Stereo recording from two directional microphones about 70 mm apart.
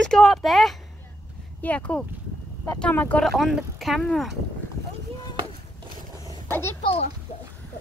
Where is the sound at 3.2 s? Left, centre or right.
Centre.